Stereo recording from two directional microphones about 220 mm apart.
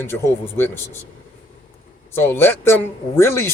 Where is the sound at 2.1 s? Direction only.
10° left (ahead or behind).